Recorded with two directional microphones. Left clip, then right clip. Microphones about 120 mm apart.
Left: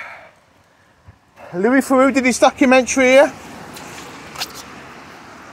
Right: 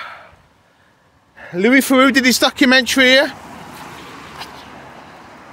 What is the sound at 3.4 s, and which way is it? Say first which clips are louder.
Vehicle: right 1 dB; 15° right (ahead or behind).